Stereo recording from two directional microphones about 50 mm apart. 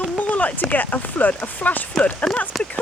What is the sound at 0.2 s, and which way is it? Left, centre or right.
Speech, left.